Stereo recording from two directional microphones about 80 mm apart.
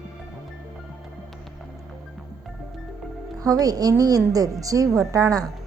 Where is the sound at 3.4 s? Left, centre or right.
Right.